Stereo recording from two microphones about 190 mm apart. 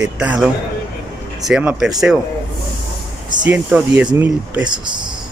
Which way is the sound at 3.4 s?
5° right (ahead or behind).